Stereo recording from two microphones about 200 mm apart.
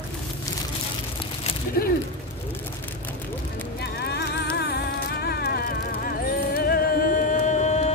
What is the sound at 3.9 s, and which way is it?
Music, 55° left (ahead or behind).